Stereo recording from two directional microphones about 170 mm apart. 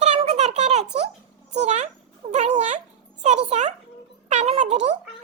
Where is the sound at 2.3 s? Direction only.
45° right (ahead or behind).